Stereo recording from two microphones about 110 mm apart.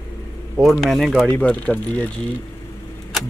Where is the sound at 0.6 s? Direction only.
Centre (ahead or behind).